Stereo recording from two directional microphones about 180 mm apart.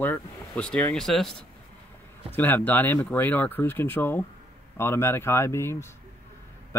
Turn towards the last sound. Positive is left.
turn(degrees=15)  # may be behind; listen again after turning